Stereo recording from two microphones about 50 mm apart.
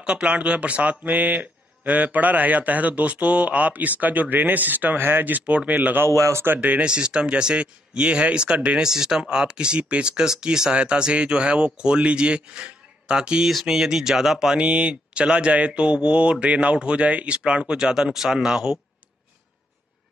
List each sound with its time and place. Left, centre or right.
0.0 s speech: right
6.0 s speech: right
6.4 s speech: right
6.8 s speech: centre
8.8 s speech: centre
13.5 s speech: centre
14.6 s speech: right